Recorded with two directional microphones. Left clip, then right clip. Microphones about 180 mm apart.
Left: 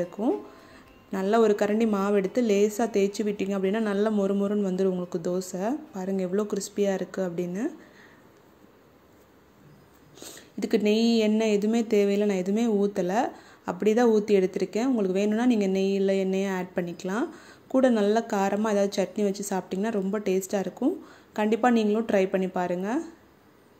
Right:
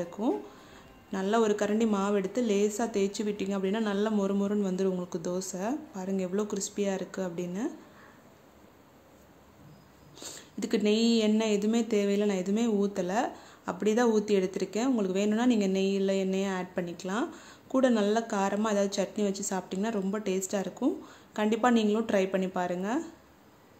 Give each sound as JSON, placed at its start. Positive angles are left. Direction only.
{"t": 0.2, "sound": "speech", "side_deg": 10}
{"t": 10.1, "sound": "speech", "side_deg": 10}